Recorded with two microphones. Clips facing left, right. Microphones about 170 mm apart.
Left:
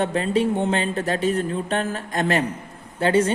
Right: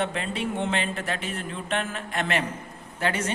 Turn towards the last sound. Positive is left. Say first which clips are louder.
# left 9 dB
turn(degrees=30)  # may be behind; listen again after turning